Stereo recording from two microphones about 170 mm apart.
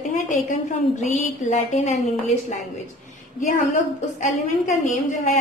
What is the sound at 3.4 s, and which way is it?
A woman's voice, 45° left (ahead or behind).